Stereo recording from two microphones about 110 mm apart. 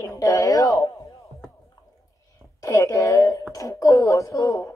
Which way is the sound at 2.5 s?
30° left (ahead or behind).